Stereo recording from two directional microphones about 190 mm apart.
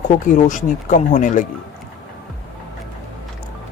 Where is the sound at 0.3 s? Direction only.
40° left (ahead or behind).